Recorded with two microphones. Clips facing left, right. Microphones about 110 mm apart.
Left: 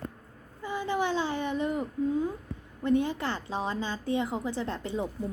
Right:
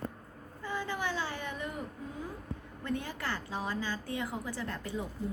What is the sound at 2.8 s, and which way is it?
A woman's voice, 20° left (ahead or behind).